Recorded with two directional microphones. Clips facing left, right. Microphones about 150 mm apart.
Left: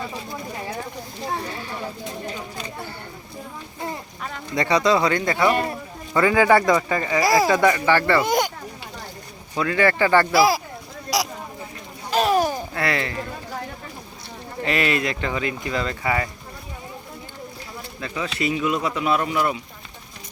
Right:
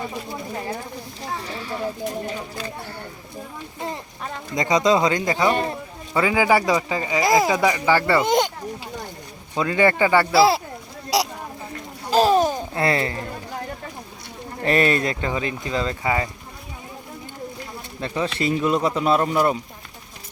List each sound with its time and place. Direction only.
4.5 s speech: 20° right (ahead or behind)
5.5 s speech: 25° right (ahead or behind)
6.1 s speech: 10° right (ahead or behind)
9.6 s speech: 20° right (ahead or behind)
10.3 s speech: 30° right (ahead or behind)
12.1 s babbling: 30° right (ahead or behind)
14.6 s speech: 35° right (ahead or behind)
15.2 s speech: 25° right (ahead or behind)
18.0 s speech: 30° right (ahead or behind)